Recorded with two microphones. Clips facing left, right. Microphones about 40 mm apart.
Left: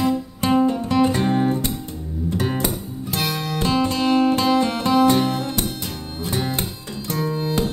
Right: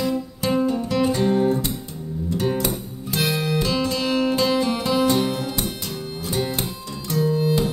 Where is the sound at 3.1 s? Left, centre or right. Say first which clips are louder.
Right 3 dB; centre.